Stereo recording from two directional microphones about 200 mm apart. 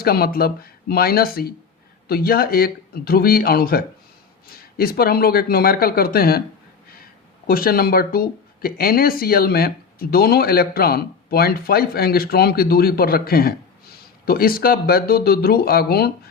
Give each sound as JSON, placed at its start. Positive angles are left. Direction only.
{"t": 0.0, "sound": "speech", "side_deg": 50}